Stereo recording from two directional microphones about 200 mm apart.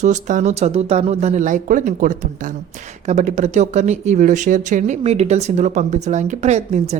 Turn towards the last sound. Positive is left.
turn(degrees=-35)  # may be behind; listen again after turning